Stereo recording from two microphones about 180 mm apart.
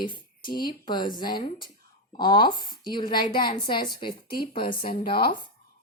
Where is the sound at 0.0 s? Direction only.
25° left (ahead or behind).